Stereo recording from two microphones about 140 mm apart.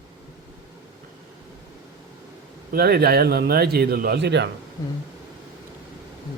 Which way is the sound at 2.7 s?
90° right.